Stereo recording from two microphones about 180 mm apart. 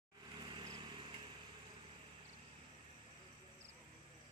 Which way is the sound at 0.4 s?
25° right (ahead or behind).